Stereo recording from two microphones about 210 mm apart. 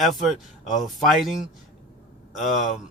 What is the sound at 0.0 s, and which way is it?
Speech, centre (ahead or behind).